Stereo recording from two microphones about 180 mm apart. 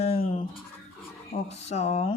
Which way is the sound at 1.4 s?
40° left (ahead or behind).